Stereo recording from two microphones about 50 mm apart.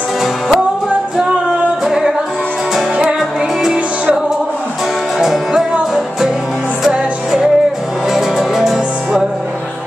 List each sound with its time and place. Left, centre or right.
1.9 s music: centre
3.7 s music: right
5.2 s music: centre
6.8 s music: centre